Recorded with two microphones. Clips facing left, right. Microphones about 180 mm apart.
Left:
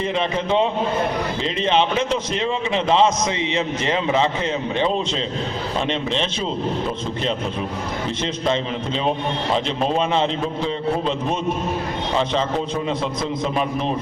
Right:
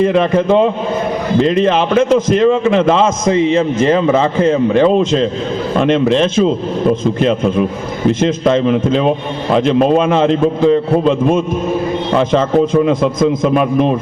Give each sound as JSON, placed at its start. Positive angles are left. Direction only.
{"t": 0.0, "sound": "a man's voice", "side_deg": -50}